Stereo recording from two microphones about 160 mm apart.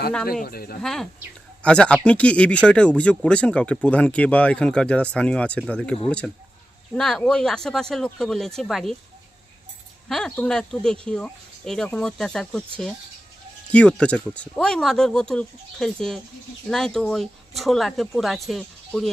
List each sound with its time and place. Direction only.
0.4 s speech: 70° left (ahead or behind)
0.8 s speech: 5° left (ahead or behind)
10.1 s speech: centre (ahead or behind)